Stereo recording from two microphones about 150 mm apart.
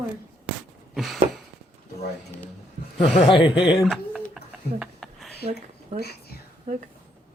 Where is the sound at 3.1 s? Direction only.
40° left (ahead or behind).